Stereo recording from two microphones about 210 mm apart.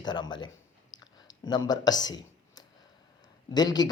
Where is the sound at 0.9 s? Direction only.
20° left (ahead or behind).